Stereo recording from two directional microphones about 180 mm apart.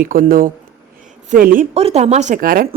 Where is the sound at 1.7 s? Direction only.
35° right (ahead or behind); by 2.6 s 50° right (ahead or behind).